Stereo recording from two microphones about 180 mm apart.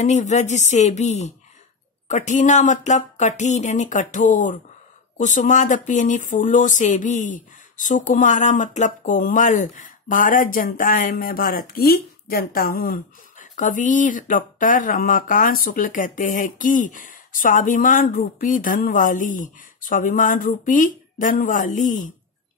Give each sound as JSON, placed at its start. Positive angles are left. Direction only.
{"t": 0.0, "sound": "speech", "side_deg": 40}